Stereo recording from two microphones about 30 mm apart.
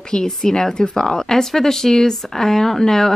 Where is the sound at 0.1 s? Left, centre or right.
Left.